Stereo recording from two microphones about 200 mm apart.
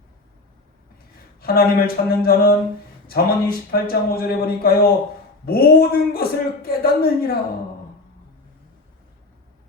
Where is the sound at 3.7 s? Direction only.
50° left (ahead or behind).